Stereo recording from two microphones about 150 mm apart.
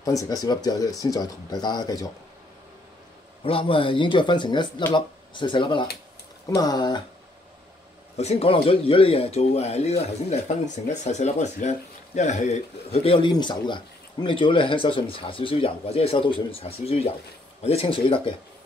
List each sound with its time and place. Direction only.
0.0 s speech: 25° left (ahead or behind)
3.4 s speech: 35° left (ahead or behind)
8.2 s speech: 45° left (ahead or behind)
13.0 s speech: 35° left (ahead or behind)